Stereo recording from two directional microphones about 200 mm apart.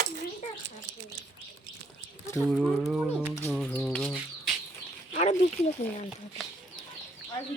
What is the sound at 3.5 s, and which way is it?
Bird, 5° left (ahead or behind).